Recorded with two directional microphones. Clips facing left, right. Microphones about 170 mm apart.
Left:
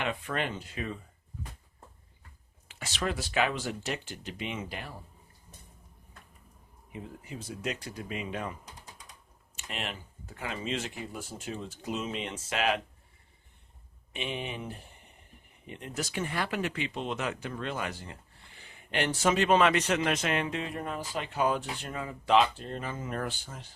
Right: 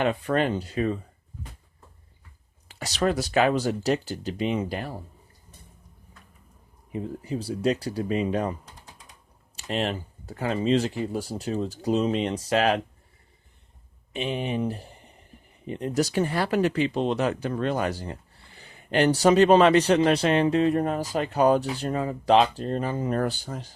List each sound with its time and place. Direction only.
0.0 s speech: 40° right (ahead or behind)
2.6 s speech: 40° right (ahead or behind)
6.9 s speech: 35° right (ahead or behind)
9.6 s speech: 35° right (ahead or behind)
14.1 s speech: 40° right (ahead or behind)